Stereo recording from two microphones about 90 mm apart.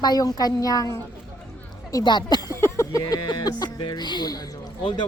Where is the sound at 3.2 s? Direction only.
60° left (ahead or behind).